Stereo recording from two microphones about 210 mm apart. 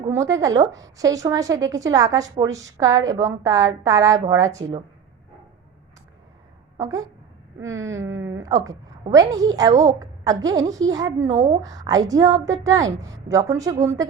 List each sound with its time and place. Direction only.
0.3 s a woman's voice: 15° right (ahead or behind)
6.7 s a woman's voice: 15° right (ahead or behind)